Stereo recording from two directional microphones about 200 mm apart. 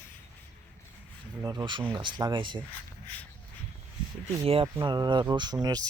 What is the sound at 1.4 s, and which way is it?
Speech, 20° right (ahead or behind).